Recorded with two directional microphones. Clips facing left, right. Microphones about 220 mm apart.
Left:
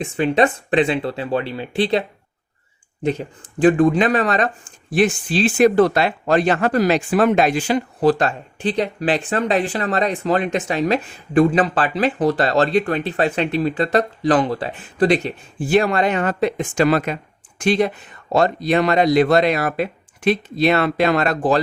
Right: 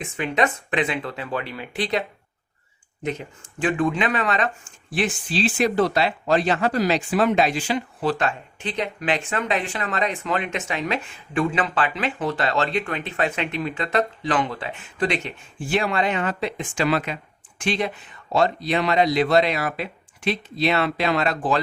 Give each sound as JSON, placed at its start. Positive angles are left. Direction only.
{"t": 0.0, "sound": "speech", "side_deg": 30}